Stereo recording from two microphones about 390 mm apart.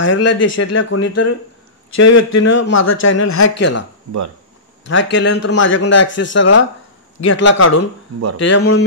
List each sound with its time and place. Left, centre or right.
0.0 s a man's voice: left
4.8 s a man's voice: left